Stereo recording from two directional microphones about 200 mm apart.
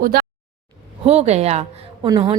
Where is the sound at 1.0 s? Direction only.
30° right (ahead or behind).